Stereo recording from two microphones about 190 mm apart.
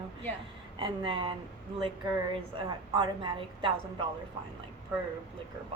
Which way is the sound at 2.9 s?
25° right (ahead or behind).